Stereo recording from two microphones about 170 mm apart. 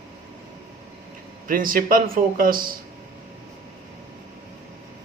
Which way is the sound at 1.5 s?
55° right (ahead or behind).